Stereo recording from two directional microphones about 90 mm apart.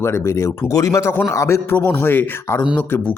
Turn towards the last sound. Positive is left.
turn(degrees=20)  # may be behind; listen again after turning